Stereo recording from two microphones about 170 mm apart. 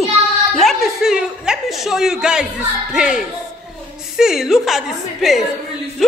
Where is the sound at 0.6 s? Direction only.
Centre (ahead or behind).